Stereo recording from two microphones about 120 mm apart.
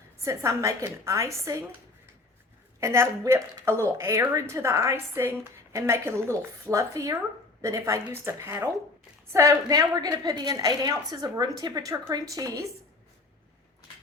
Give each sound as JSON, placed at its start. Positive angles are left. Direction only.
{"t": 0.2, "sound": "a woman's voice", "side_deg": -25}
{"t": 2.8, "sound": "a woman's voice", "side_deg": -20}